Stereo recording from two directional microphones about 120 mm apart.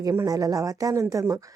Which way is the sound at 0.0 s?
30° right (ahead or behind).